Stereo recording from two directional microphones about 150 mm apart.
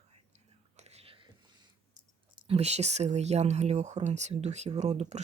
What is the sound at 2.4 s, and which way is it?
Speech, 45° right (ahead or behind).